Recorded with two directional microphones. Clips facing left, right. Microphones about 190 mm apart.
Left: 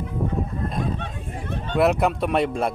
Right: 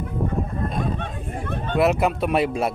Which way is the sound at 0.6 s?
50° right (ahead or behind).